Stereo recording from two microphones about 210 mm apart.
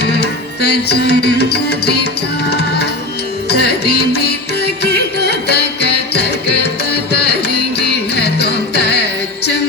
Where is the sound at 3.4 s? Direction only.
50° left (ahead or behind).